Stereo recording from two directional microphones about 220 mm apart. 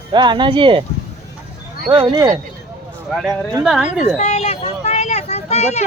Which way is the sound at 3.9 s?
30° left (ahead or behind).